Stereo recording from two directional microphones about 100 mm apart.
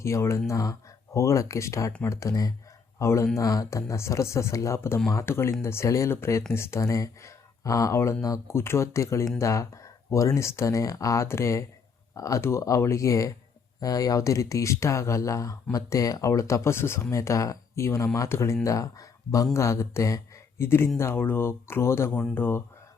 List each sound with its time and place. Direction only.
0.0 s speech: 30° left (ahead or behind)